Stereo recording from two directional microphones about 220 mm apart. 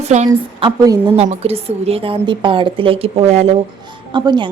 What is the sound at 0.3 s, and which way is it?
A woman's voice, 15° right (ahead or behind).